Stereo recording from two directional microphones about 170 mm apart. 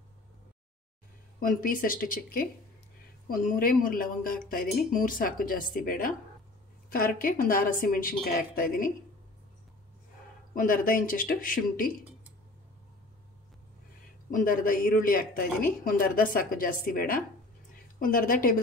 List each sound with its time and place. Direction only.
1.4 s speech: 55° left (ahead or behind)
10.5 s speech: 55° left (ahead or behind)
14.3 s speech: 55° left (ahead or behind)